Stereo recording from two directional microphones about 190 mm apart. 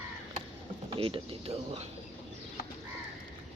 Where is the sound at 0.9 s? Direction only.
30° right (ahead or behind).